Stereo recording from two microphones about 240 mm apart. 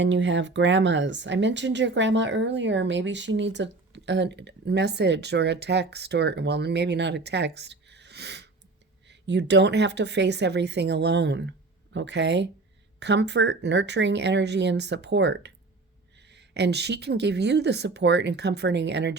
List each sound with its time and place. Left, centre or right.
0.0 s speech: right